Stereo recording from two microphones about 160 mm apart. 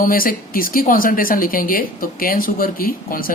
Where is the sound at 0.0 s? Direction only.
60° left (ahead or behind).